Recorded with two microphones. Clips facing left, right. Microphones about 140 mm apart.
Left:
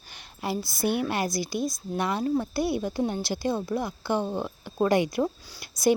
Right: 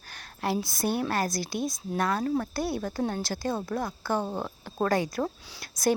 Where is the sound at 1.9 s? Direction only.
10° left (ahead or behind).